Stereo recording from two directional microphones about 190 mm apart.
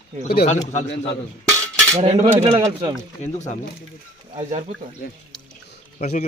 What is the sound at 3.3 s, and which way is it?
Speech, 40° left (ahead or behind).